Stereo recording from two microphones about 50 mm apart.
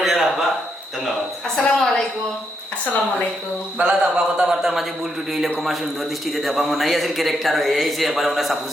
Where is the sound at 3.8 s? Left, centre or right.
Centre.